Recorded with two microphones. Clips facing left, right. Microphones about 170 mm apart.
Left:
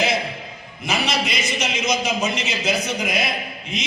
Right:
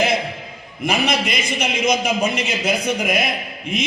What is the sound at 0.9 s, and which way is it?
A man's voice, 55° right (ahead or behind).